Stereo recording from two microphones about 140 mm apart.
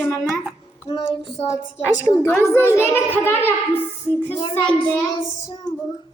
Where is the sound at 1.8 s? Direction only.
15° left (ahead or behind).